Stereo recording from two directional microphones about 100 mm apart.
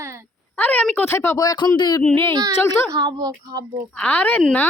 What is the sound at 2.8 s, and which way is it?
Speech, 40° right (ahead or behind).